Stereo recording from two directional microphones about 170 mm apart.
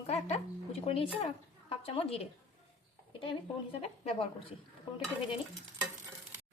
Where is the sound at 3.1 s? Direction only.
30° left (ahead or behind).